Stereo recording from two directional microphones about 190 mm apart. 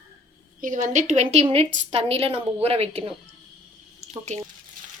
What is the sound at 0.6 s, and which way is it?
A woman's voice, 45° right (ahead or behind).